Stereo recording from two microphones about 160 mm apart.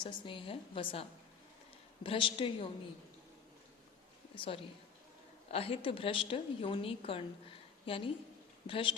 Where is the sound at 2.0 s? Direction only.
30° left (ahead or behind).